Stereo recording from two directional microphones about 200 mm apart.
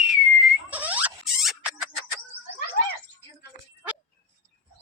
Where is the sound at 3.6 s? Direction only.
45° left (ahead or behind).